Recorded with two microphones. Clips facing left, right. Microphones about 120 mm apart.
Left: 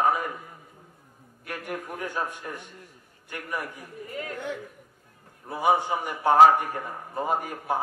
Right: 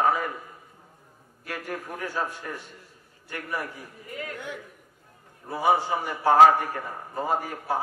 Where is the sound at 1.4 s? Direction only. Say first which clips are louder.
Even; 15° left (ahead or behind).